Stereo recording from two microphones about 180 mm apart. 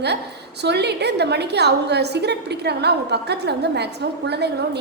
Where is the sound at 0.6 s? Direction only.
70° right (ahead or behind).